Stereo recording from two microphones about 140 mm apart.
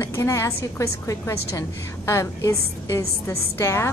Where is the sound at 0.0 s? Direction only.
20° left (ahead or behind).